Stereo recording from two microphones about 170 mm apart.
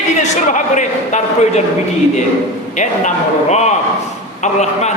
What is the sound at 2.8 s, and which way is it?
A man's voice, 45° left (ahead or behind).